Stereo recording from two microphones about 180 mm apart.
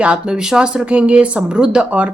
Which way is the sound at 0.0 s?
5° right (ahead or behind).